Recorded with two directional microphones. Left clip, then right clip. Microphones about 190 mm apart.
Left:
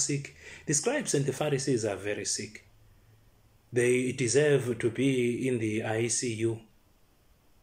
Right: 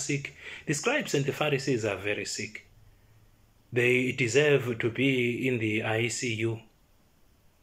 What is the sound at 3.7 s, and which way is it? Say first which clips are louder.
Speech: right 1 dB; 35° left (ahead or behind).